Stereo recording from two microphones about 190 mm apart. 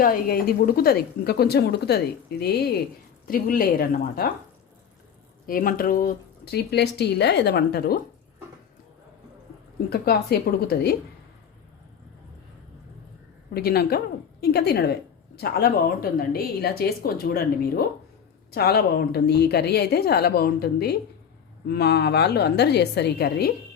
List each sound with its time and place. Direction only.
0.0 s a woman's voice: 50° left (ahead or behind)
5.5 s speech: 45° left (ahead or behind)
9.9 s speech: 55° left (ahead or behind)
13.5 s a woman's voice: 55° left (ahead or behind)